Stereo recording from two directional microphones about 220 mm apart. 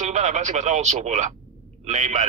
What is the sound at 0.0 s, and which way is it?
A man's voice, 30° right (ahead or behind).